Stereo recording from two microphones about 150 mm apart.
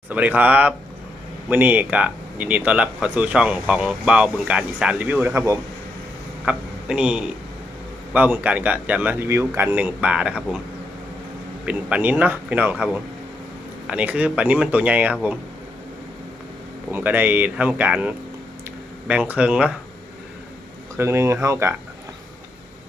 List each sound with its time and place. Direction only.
0.1 s speech: 10° right (ahead or behind)
6.4 s speech: 5° right (ahead or behind)
11.6 s speech: 10° right (ahead or behind)
16.9 s speech: 10° right (ahead or behind)
20.9 s speech: 20° right (ahead or behind)